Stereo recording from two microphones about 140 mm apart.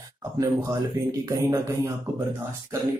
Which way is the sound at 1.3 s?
20° right (ahead or behind).